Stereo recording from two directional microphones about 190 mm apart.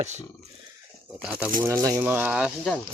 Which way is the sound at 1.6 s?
15° right (ahead or behind).